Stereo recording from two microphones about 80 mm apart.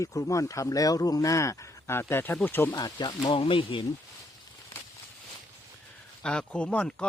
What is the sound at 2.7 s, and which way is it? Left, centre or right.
Speech, left.